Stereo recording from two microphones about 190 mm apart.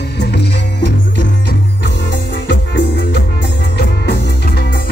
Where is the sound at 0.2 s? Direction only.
65° left (ahead or behind).